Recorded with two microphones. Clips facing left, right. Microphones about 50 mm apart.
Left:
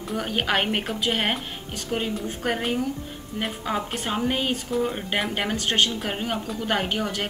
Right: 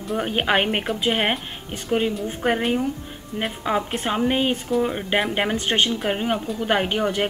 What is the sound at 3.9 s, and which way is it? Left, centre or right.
A woman's voice, centre.